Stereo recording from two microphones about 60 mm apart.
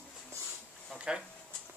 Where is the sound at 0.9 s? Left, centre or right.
Centre.